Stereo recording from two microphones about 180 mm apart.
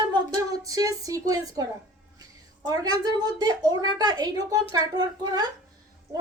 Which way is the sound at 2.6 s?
20° right (ahead or behind).